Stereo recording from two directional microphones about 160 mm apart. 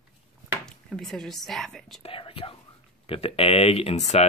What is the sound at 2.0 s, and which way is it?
Speech, 35° left (ahead or behind).